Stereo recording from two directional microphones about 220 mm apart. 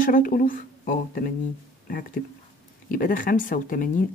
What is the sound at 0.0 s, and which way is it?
Speech, 40° left (ahead or behind).